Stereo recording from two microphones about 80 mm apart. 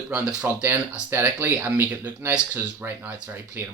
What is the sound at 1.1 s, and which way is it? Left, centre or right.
Speech, right.